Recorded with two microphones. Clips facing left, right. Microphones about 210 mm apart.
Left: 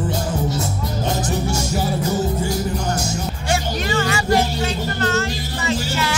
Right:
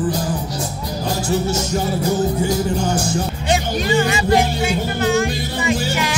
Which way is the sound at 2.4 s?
30° right (ahead or behind).